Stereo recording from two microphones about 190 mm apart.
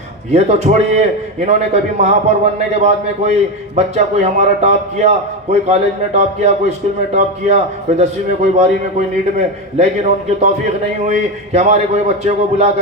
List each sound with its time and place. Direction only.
0.3 s a man's voice: 35° right (ahead or behind)